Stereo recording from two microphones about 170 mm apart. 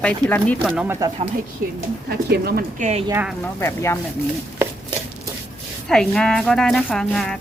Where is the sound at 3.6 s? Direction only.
15° left (ahead or behind).